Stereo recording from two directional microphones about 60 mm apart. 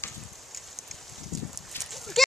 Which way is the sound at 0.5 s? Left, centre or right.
Centre.